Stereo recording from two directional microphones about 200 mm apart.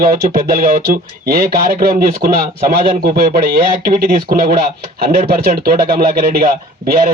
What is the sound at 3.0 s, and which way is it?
Speech, 45° right (ahead or behind).